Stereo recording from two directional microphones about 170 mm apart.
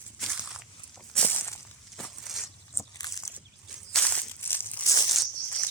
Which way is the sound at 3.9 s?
10° left (ahead or behind).